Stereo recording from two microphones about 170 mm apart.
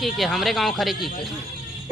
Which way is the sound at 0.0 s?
Centre (ahead or behind).